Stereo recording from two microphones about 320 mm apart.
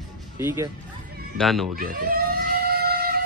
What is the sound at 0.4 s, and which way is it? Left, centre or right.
Speech, centre.